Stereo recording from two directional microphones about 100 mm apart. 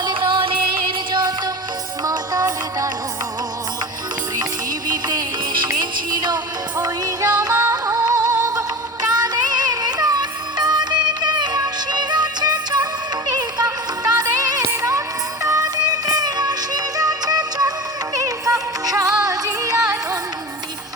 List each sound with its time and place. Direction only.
0.0 s music: 55° right (ahead or behind)
2.0 s music: 35° right (ahead or behind)
4.9 s music: 45° right (ahead or behind)
7.5 s music: 30° right (ahead or behind)